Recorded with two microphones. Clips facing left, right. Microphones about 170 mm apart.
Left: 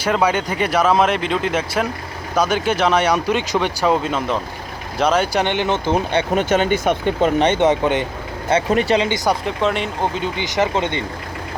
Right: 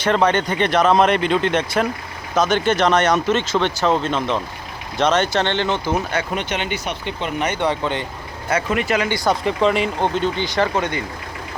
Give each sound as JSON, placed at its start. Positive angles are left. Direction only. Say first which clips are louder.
{"t": 0.0, "sound": "speech", "louder": "right 1 dB", "side_deg": 5}
{"t": 6.3, "sound": "speech", "louder": "left 7 dB", "side_deg": 45}
{"t": 7.3, "sound": "speech", "louder": "left 2 dB", "side_deg": 25}
{"t": 8.4, "sound": "speech", "louder": "left 4 dB", "side_deg": 30}
{"t": 9.0, "sound": "speech", "louder": "left 1 dB", "side_deg": 20}
{"t": 9.4, "sound": "speech", "louder": "right 2 dB", "side_deg": 0}
{"t": 10.3, "sound": "speech", "louder": "left 1 dB", "side_deg": 15}